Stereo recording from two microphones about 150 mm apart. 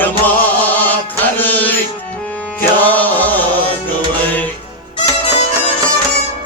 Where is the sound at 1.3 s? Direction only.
10° left (ahead or behind).